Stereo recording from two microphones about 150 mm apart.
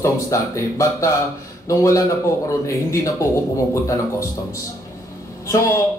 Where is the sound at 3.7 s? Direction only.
20° left (ahead or behind).